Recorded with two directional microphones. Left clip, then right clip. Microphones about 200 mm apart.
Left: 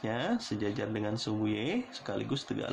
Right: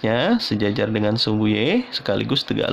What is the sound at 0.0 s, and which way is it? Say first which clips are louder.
Speech: right 14 dB; 45° right (ahead or behind).